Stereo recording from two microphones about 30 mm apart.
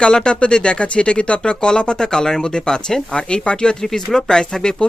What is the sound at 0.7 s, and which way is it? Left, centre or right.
Speech, left.